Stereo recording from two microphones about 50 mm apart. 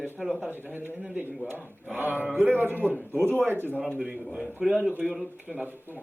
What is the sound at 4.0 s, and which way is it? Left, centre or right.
Speech, right.